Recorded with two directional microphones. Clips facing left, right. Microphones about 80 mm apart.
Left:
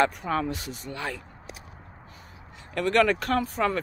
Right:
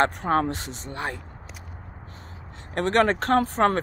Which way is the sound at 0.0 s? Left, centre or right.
Right.